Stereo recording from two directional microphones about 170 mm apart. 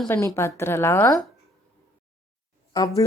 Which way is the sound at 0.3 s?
15° left (ahead or behind).